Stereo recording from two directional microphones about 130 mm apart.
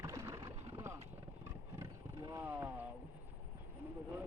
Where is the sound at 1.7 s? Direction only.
25° right (ahead or behind).